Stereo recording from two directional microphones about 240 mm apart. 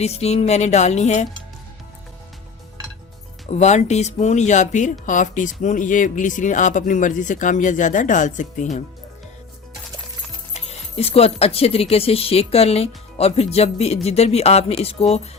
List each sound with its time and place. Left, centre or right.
0.0 s speech: left
3.5 s speech: left
10.5 s speech: left